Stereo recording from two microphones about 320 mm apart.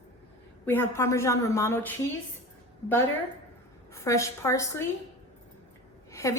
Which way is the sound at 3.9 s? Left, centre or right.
Centre.